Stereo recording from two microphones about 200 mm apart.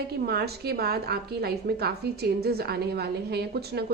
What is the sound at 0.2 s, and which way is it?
A woman's voice, 50° right (ahead or behind).